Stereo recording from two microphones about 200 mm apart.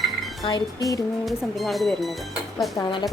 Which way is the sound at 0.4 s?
20° left (ahead or behind).